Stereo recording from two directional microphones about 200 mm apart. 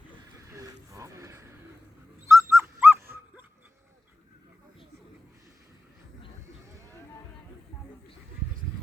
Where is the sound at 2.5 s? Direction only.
10° right (ahead or behind).